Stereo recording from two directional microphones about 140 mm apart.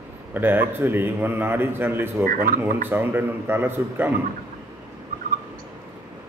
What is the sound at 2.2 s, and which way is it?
Speech, 80° right.